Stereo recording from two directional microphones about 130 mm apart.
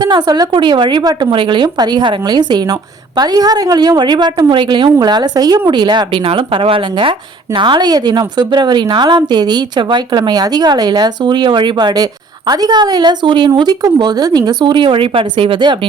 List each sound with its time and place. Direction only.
0.0 s a woman's voice: 30° right (ahead or behind)